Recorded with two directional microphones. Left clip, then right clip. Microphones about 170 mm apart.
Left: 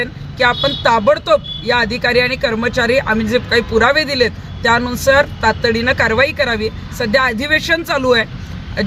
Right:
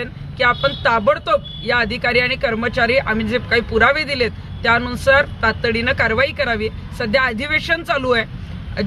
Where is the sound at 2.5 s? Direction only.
20° right (ahead or behind).